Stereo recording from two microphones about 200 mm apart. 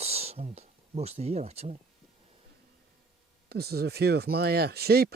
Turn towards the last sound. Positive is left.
turn(degrees=-50)  # may be behind; listen again after turning